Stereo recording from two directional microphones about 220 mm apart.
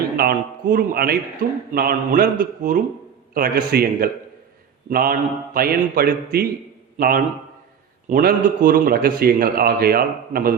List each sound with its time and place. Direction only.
0.2 s a man's voice: 40° right (ahead or behind)
8.1 s a man's voice: 40° right (ahead or behind)